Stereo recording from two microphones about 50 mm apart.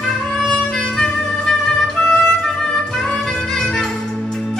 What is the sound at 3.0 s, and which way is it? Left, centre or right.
Music, centre.